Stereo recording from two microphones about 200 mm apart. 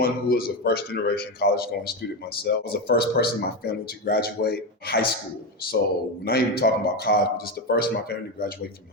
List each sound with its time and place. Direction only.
0.0 s a man's voice: 50° left (ahead or behind)
6.2 s a man's voice: 50° left (ahead or behind)